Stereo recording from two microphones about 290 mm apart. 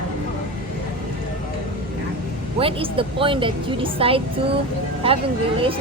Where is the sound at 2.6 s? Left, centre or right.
Centre.